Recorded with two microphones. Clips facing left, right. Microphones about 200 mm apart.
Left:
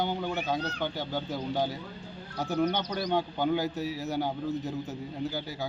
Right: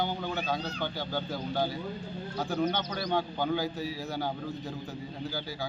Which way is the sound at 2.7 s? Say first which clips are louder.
Left 2 dB; 15° left (ahead or behind).